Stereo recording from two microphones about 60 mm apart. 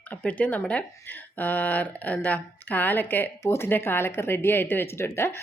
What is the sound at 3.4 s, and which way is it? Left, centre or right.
Speech, left.